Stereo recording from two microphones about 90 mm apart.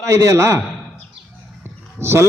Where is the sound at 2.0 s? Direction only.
25° right (ahead or behind).